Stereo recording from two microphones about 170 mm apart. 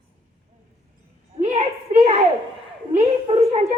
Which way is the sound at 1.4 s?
35° right (ahead or behind).